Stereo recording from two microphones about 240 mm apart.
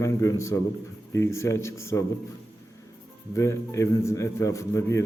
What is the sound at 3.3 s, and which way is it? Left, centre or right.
A man's voice, centre.